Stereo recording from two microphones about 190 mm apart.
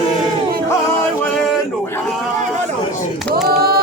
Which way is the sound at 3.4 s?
55° right (ahead or behind).